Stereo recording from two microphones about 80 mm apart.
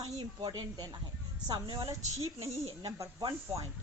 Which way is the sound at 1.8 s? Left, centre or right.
Right.